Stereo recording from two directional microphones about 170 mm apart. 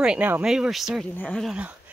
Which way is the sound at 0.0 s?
5° right (ahead or behind).